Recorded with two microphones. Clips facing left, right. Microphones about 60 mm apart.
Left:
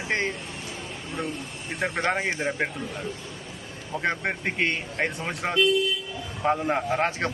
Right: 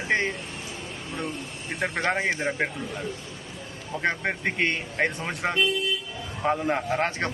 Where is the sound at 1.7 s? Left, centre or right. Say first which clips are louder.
Even; centre.